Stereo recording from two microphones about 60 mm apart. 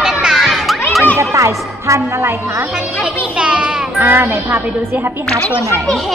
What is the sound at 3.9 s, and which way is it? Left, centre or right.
A woman's voice, right.